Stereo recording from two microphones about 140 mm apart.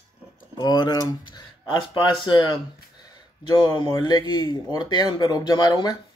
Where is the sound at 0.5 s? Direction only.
30° left (ahead or behind).